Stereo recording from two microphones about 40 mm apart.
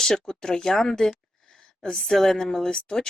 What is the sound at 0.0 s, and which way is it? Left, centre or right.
Speech, centre.